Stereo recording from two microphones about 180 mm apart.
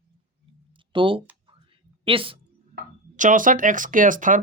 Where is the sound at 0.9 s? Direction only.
30° right (ahead or behind).